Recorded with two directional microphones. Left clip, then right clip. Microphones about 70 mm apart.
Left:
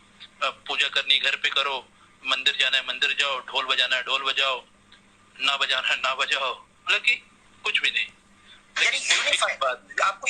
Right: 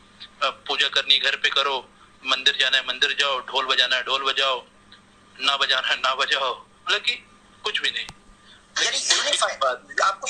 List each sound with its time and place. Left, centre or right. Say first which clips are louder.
0.2 s a man's voice: right 3 dB; right